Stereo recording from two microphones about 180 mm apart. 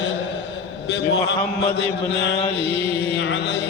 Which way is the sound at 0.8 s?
75° left (ahead or behind).